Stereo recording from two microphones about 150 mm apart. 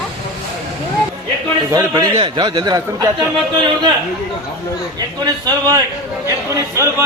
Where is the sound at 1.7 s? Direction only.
25° right (ahead or behind).